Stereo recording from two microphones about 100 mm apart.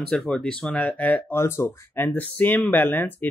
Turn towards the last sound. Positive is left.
turn(degrees=20)  # may be behind; listen again after turning